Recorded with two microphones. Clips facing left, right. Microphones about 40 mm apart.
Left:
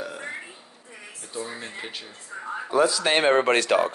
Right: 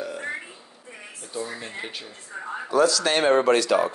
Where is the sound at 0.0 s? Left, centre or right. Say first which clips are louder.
Right 2 dB; centre.